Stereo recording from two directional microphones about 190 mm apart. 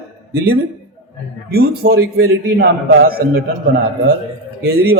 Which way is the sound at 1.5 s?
55° right (ahead or behind).